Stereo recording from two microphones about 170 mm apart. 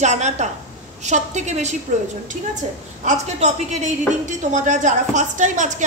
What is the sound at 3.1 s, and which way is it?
A woman's voice, 45° right (ahead or behind).